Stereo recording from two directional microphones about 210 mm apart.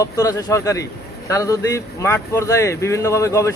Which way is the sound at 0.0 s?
15° left (ahead or behind).